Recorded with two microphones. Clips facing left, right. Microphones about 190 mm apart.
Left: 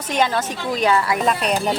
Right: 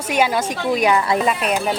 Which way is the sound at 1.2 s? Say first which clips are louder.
Even; 5° right (ahead or behind).